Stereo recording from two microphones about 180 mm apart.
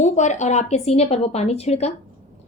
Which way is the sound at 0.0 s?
40° left (ahead or behind).